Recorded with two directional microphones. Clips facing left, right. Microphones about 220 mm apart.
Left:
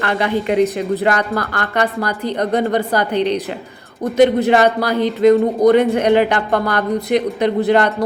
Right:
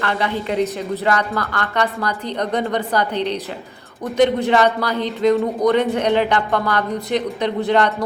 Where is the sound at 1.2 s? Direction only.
50° left (ahead or behind).